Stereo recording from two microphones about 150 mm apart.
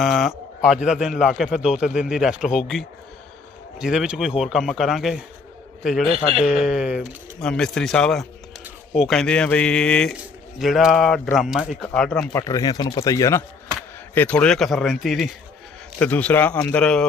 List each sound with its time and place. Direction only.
0.0 s speech: centre (ahead or behind)
12.3 s speech: 20° left (ahead or behind)
14.2 s a man's voice: 10° left (ahead or behind)